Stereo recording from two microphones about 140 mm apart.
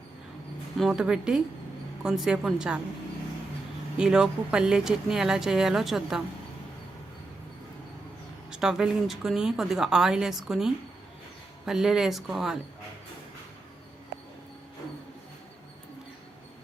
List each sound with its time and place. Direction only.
0.8 s speech: 5° right (ahead or behind)
3.9 s speech: 5° right (ahead or behind)
8.4 s speech: 5° right (ahead or behind)